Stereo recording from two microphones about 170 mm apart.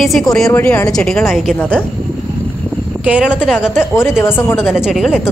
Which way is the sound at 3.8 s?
15° left (ahead or behind).